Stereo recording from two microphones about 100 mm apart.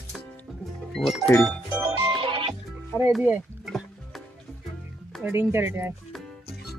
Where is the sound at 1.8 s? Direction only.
25° right (ahead or behind).